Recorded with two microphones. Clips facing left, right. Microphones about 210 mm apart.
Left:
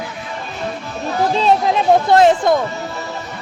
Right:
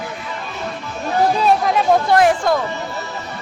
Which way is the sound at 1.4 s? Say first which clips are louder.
Left 1 dB; 25° left (ahead or behind).